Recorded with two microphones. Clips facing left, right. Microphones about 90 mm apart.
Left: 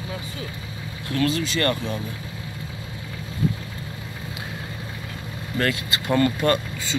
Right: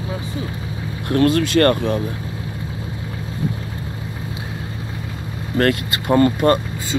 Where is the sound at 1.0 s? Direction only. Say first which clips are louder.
Right 7 dB; 50° right (ahead or behind).